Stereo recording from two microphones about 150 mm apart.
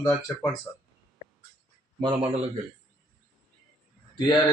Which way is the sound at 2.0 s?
30° right (ahead or behind).